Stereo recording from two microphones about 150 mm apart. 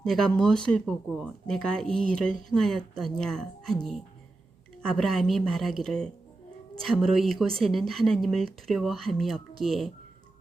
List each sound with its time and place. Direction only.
0.0 s speech: 5° left (ahead or behind)